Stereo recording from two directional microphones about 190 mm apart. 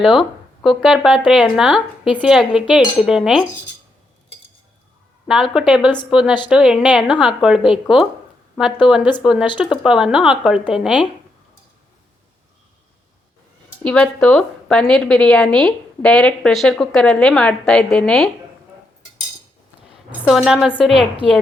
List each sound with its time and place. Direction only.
0.2 s a woman's voice: centre (ahead or behind)
5.3 s a woman's voice: 5° right (ahead or behind)
5.8 s a woman's voice: 25° left (ahead or behind)
6.1 s a woman's voice: 5° right (ahead or behind)
8.8 s a woman's voice: 25° left (ahead or behind)
9.2 s a woman's voice: 5° right (ahead or behind)
13.8 s a woman's voice: 5° left (ahead or behind)
20.2 s a woman's voice: centre (ahead or behind)